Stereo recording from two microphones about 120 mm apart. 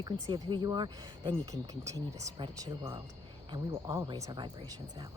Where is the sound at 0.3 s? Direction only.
35° right (ahead or behind).